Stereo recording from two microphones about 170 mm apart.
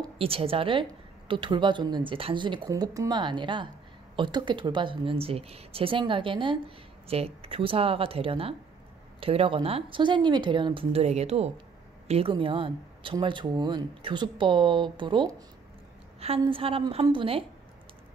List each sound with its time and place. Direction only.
0.0 s a woman's voice: 35° right (ahead or behind)